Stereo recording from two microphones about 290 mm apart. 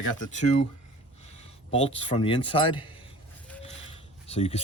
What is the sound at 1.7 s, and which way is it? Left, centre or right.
Speech, centre.